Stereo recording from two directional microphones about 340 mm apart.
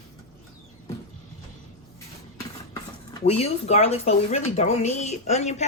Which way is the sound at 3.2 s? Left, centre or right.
Centre.